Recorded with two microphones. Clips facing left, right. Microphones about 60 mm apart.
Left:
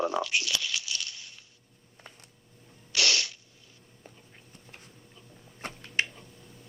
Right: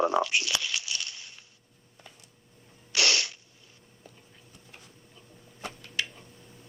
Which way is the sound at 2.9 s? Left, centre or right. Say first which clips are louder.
Right 1 dB; right.